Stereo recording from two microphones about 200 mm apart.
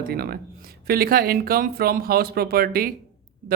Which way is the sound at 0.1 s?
50° right (ahead or behind).